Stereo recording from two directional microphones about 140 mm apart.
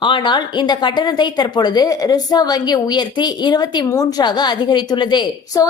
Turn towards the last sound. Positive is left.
turn(degrees=30)  # may be behind; listen again after turning